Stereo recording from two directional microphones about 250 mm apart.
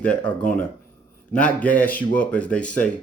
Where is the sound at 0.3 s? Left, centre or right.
Centre.